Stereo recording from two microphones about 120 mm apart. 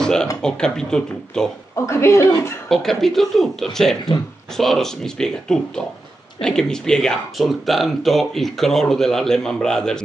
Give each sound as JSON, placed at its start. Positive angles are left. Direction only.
{"t": 0.0, "sound": "speech", "side_deg": 5}
{"t": 1.8, "sound": "a woman's voice", "side_deg": 25}
{"t": 2.7, "sound": "speech", "side_deg": 0}